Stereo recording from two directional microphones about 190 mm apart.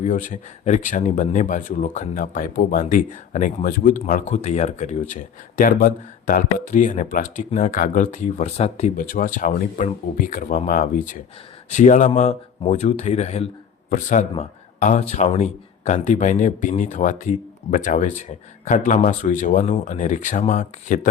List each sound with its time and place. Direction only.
0.0 s speech: 40° left (ahead or behind)